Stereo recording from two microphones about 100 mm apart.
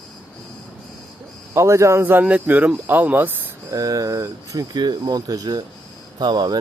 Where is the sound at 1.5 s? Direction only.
30° right (ahead or behind).